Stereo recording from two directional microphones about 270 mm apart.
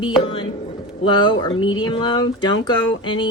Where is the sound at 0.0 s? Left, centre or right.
Centre.